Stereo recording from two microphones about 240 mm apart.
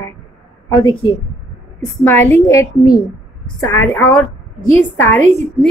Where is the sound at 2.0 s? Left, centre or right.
Centre.